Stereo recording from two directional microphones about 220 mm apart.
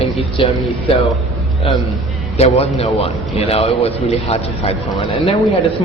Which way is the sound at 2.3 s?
30° left (ahead or behind).